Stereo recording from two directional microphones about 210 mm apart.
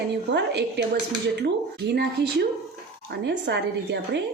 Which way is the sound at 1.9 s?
50° right (ahead or behind).